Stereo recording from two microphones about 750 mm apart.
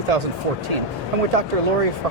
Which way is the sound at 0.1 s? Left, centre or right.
Right.